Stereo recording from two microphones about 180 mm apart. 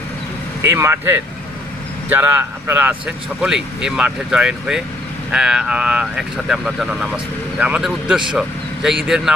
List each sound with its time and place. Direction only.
0.6 s speech: 15° right (ahead or behind)